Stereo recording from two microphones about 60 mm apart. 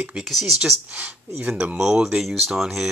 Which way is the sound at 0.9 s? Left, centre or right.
Right.